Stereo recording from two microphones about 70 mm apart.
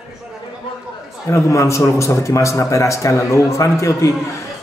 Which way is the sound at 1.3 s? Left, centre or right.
Left.